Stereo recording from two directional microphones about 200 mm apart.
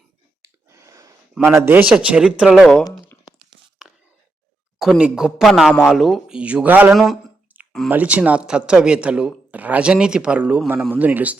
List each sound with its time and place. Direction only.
0.4 s a sound: 15° right (ahead or behind)
1.5 s speech: 5° right (ahead or behind)
4.8 s a man's voice: 5° right (ahead or behind)